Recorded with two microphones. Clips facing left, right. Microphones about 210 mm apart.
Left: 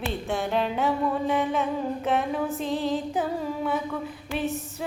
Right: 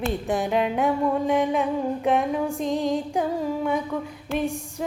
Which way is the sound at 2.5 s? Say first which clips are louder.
Right 3 dB; 15° right (ahead or behind).